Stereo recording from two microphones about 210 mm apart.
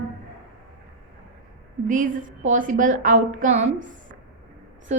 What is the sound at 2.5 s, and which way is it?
A woman's voice, 40° right (ahead or behind).